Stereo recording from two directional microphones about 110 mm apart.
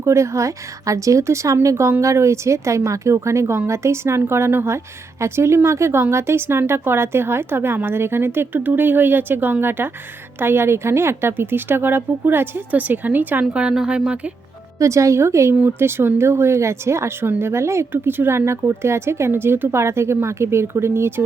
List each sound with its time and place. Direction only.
0.0 s speech: 25° right (ahead or behind); by 14.3 s 10° right (ahead or behind)
14.8 s speech: 30° right (ahead or behind)